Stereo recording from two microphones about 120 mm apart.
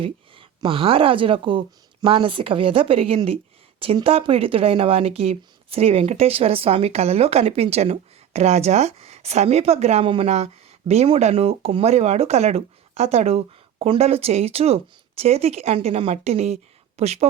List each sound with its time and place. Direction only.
0.0 s a woman's voice: 45° right (ahead or behind)